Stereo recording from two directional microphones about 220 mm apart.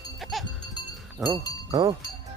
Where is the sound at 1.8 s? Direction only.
15° right (ahead or behind).